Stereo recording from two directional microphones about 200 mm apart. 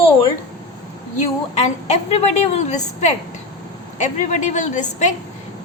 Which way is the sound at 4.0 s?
35° left (ahead or behind).